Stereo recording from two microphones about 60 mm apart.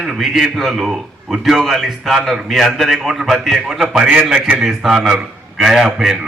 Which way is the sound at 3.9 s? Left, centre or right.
Right.